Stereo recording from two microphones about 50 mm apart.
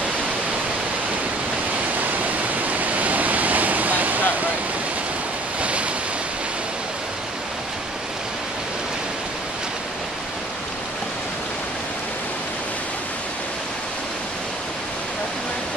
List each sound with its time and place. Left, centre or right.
2.8 s waves: right
5.6 s waves: right